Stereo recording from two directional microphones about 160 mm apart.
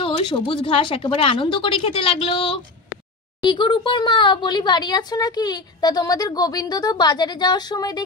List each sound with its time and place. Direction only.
0.0 s speech: 30° left (ahead or behind)